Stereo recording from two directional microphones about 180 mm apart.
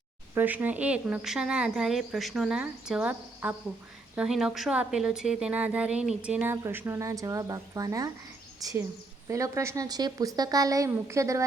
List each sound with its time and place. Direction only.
0.3 s a woman's voice: 10° right (ahead or behind)
9.3 s a woman's voice: 15° right (ahead or behind)